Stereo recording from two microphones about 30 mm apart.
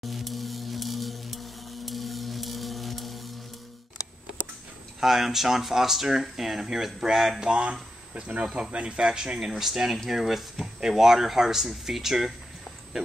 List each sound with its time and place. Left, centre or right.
0.0 s music: centre
5.0 s speech: centre
7.3 s speech: right
8.7 s speech: right
9.0 s speech: right
9.5 s speech: centre